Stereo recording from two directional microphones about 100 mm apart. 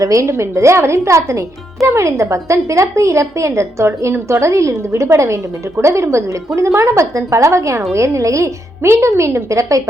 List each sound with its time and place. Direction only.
0.0 s a woman's voice: 30° right (ahead or behind)